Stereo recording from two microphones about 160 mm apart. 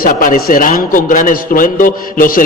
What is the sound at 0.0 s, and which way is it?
A man's voice, 60° left (ahead or behind).